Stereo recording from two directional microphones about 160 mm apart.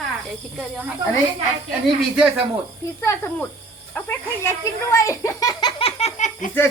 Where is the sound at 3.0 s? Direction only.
15° left (ahead or behind).